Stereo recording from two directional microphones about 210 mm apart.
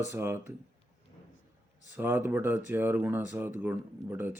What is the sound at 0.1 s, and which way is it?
Speech, 10° right (ahead or behind).